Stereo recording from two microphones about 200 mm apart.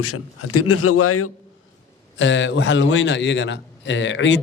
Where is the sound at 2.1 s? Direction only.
65° left (ahead or behind).